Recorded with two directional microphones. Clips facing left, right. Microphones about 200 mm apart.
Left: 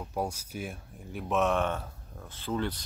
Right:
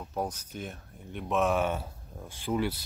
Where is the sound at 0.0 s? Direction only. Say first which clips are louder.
Left 1 dB; 10° left (ahead or behind).